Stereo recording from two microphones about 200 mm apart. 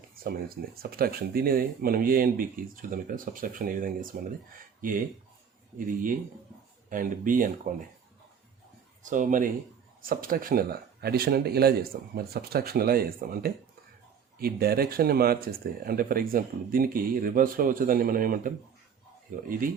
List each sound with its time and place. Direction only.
0.2 s speech: 45° right (ahead or behind)
6.9 s speech: 45° right (ahead or behind)
9.0 s speech: 40° right (ahead or behind)